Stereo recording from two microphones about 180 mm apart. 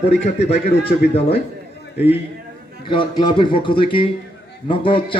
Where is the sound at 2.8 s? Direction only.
25° left (ahead or behind).